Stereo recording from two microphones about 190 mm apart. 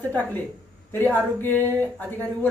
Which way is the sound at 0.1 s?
10° left (ahead or behind).